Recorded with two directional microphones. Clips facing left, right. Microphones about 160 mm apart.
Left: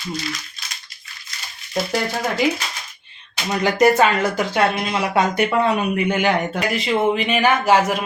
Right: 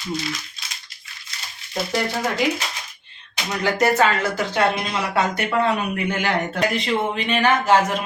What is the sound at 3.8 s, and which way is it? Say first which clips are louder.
Speech: left 4 dB; 15° left (ahead or behind).